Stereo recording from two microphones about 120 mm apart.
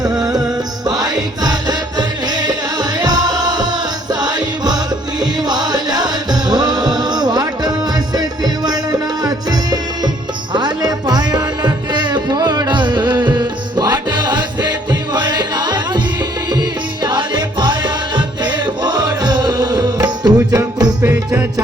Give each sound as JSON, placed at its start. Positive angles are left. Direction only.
{"t": 0.0, "sound": "music", "side_deg": -35}
{"t": 21.0, "sound": "music", "side_deg": -20}